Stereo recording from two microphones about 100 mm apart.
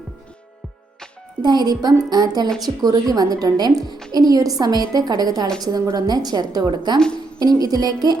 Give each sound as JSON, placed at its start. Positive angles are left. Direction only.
{"t": 1.4, "sound": "a woman's voice", "side_deg": -45}